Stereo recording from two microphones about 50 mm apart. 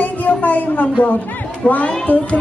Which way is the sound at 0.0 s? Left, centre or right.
Left.